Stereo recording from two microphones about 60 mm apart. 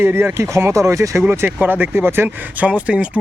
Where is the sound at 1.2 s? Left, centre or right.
Right.